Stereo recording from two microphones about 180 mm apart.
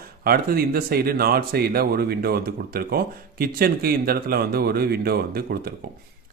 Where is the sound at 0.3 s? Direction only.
55° right (ahead or behind).